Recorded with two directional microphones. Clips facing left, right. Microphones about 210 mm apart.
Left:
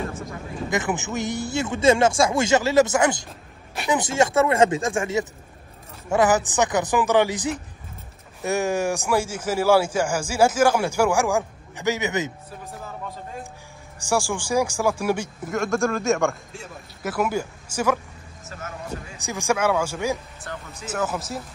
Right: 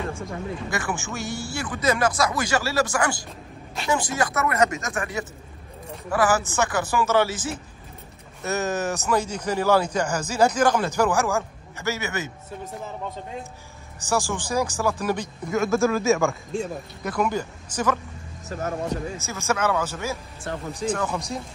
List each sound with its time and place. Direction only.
0.7 s speech: 20° left (ahead or behind)
13.9 s speech: 10° left (ahead or behind)
15.5 s a man's voice: centre (ahead or behind)
18.5 s speech: 35° right (ahead or behind)
19.1 s a man's voice: 15° left (ahead or behind)